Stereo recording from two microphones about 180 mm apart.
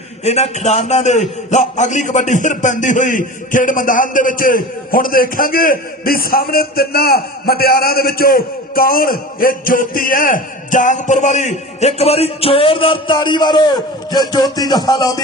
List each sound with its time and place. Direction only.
0.3 s a man's voice: 40° left (ahead or behind)
14.1 s music: 25° left (ahead or behind)